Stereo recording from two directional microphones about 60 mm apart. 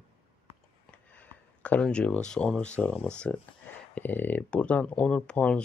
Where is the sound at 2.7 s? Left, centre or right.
Left.